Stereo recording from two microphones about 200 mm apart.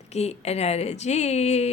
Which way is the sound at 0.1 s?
35° left (ahead or behind).